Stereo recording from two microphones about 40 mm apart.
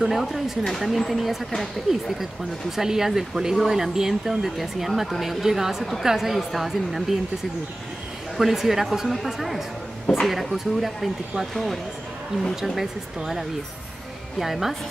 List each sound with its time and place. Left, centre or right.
0.1 s speech: centre
8.4 s speech: centre
10.1 s speech: centre
10.4 s speech: centre